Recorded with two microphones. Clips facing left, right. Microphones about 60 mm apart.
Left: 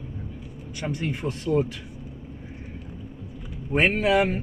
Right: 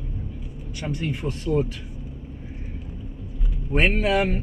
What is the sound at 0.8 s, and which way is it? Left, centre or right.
Speech, left.